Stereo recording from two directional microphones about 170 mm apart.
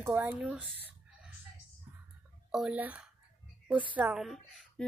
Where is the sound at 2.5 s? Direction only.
5° right (ahead or behind).